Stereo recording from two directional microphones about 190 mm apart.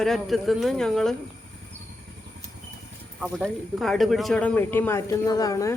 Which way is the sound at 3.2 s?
Centre (ahead or behind).